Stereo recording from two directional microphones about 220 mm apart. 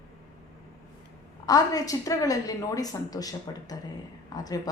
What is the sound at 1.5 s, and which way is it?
A woman's voice, 15° left (ahead or behind).